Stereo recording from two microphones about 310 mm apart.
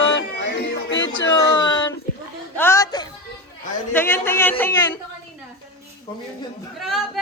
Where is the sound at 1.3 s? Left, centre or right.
Centre.